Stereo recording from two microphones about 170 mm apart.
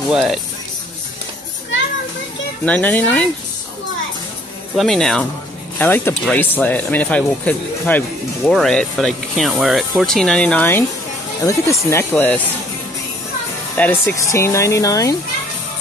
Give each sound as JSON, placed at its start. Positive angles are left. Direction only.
{"t": 0.1, "sound": "speech", "side_deg": 0}
{"t": 2.6, "sound": "speech", "side_deg": 10}
{"t": 4.7, "sound": "speech", "side_deg": 0}
{"t": 13.7, "sound": "speech", "side_deg": 10}